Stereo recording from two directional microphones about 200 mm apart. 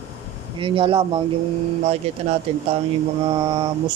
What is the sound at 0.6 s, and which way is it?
Speech, 25° right (ahead or behind).